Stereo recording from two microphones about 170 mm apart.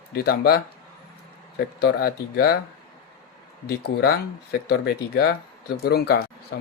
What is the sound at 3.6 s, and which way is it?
Speech, 70° left (ahead or behind).